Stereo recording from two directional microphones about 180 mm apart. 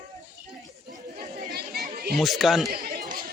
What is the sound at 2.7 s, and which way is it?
Chatter, 60° right (ahead or behind).